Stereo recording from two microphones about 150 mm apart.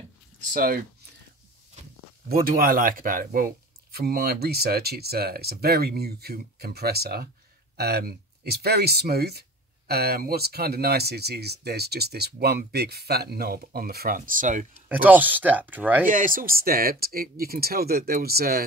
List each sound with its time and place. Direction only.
0.5 s speech: 70° right (ahead or behind)
2.2 s speech: 85° right; by 14.7 s 60° right (ahead or behind)
14.9 s speech: 10° right (ahead or behind)
16.1 s speech: 65° right (ahead or behind); by 18.6 s 90° right